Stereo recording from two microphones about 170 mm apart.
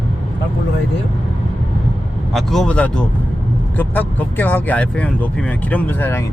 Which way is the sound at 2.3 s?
Centre (ahead or behind).